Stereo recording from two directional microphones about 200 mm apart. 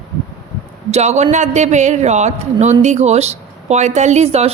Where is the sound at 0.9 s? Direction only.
35° right (ahead or behind).